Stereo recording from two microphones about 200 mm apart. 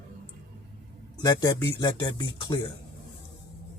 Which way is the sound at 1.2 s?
20° left (ahead or behind).